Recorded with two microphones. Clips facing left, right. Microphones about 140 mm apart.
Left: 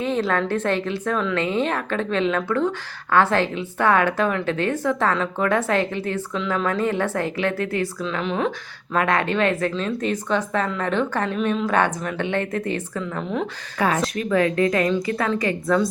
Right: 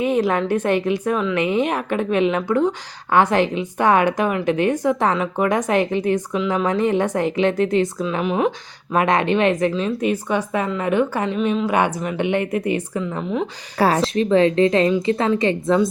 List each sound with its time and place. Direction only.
0.0 s a woman's voice: 15° right (ahead or behind)
13.7 s a woman's voice: 35° right (ahead or behind)